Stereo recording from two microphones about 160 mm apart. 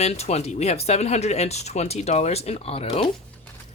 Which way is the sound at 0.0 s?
40° left (ahead or behind).